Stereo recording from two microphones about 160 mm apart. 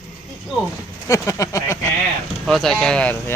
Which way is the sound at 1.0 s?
20° left (ahead or behind).